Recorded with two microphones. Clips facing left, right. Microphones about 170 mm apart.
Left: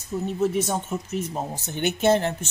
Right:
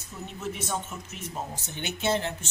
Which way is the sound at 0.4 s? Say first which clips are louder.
Left 8 dB; 40° left (ahead or behind).